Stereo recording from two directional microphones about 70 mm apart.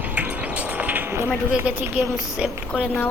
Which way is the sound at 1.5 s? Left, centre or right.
Centre.